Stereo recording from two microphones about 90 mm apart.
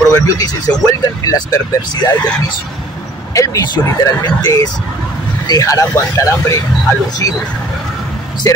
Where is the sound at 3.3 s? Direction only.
40° left (ahead or behind).